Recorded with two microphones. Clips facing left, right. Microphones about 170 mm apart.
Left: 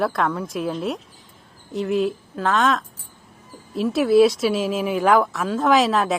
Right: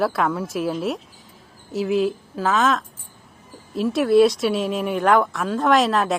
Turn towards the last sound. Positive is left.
turn(degrees=0)  # may be behind; listen again after turning